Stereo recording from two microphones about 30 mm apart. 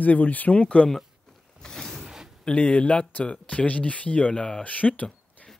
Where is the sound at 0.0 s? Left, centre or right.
Left.